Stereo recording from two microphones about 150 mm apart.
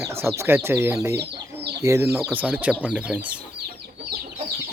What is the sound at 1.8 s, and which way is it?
Speech, 20° right (ahead or behind).